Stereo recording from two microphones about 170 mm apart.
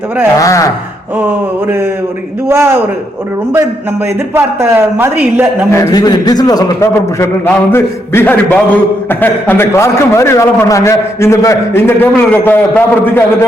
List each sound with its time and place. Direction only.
0.3 s speech: 20° left (ahead or behind)
2.5 s a woman's voice: 15° right (ahead or behind)
4.4 s a woman's voice: 15° right (ahead or behind)
5.7 s a man's voice: 20° left (ahead or behind)